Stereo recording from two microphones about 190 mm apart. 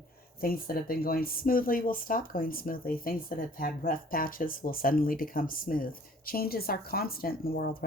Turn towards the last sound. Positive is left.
turn(degrees=50)  # may be behind; listen again after turning